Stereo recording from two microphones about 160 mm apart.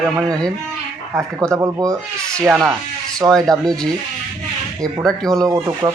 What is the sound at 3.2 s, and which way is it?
Speech, 5° left (ahead or behind).